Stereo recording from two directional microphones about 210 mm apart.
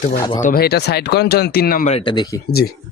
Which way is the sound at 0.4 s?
45° left (ahead or behind).